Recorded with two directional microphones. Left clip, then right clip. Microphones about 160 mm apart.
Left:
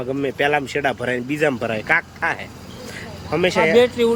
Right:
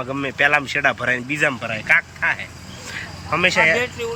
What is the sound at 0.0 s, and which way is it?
Speech, 15° left (ahead or behind).